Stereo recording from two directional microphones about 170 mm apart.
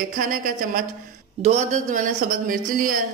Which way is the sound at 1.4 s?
45° right (ahead or behind).